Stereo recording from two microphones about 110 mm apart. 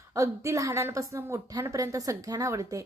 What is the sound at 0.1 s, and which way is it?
A woman's voice, 25° right (ahead or behind).